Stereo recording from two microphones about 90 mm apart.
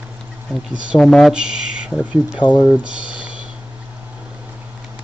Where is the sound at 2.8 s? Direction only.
10° right (ahead or behind).